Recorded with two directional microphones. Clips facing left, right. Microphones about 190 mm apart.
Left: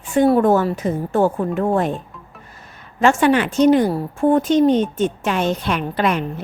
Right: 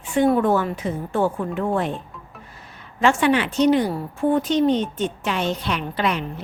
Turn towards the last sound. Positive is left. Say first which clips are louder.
# left 4 dB
turn(degrees=50)  # may be behind; listen again after turning